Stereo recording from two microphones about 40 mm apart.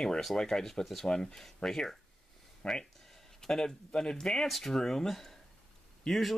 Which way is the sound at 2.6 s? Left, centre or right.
Left.